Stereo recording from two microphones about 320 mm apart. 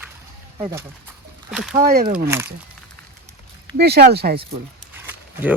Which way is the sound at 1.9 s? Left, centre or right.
Right.